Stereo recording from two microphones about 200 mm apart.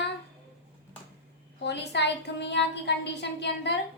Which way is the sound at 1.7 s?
60° left (ahead or behind).